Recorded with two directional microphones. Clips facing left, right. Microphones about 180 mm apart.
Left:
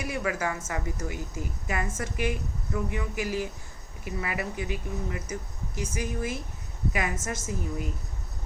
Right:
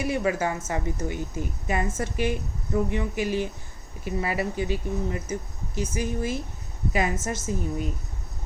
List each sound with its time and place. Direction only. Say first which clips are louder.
0.0 s a woman's voice: right 5 dB; 25° right (ahead or behind)